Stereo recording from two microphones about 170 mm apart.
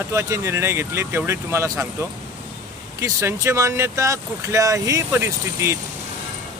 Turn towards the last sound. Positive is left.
turn(degrees=-15)  # may be behind; listen again after turning